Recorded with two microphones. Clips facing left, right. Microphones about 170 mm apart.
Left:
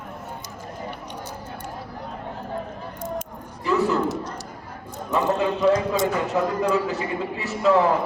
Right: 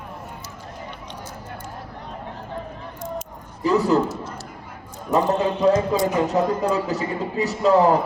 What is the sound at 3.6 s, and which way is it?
Speech, 40° right (ahead or behind).